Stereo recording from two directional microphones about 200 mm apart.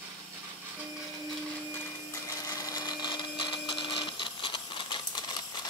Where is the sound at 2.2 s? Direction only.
15° left (ahead or behind).